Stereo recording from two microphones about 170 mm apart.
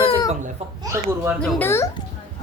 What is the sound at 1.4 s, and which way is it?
Speech, 10° left (ahead or behind).